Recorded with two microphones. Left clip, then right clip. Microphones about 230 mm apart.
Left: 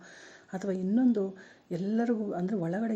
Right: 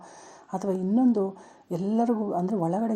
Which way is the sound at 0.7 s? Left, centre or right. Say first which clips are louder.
Right 4 dB; right.